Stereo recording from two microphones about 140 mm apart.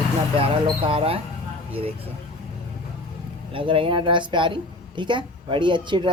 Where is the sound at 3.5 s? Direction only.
40° right (ahead or behind).